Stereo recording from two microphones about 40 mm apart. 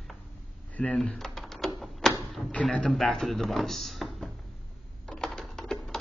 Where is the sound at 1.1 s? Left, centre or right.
Centre.